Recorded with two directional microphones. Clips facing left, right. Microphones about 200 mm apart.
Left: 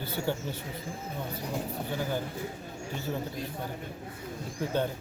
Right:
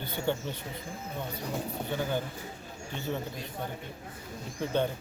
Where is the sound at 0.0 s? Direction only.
5° left (ahead or behind).